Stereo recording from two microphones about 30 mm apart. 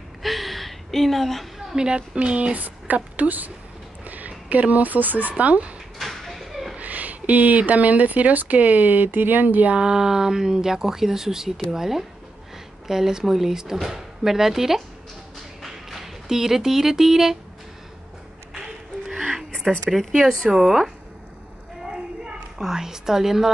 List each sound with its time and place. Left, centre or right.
0.2 s gasp: centre
1.8 s speech: right
2.5 s a woman's voice: right
4.0 s a sound: right
5.3 s speech: right
5.9 s a sound: centre
6.8 s a sound: right
7.7 s speech: right
8.5 s speech: right
9.8 s speech: right
19.9 s speech: centre
22.6 s speech: centre